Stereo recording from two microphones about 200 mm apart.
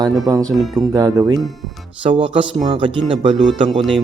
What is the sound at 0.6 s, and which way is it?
Speech, centre (ahead or behind).